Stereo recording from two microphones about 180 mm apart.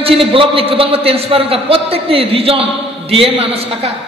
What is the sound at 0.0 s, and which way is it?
A man's voice, 30° right (ahead or behind).